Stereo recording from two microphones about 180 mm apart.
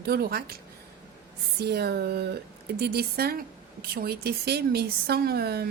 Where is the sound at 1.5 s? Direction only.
65° right (ahead or behind).